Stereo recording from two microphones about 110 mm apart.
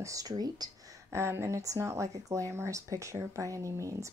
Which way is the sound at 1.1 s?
25° right (ahead or behind).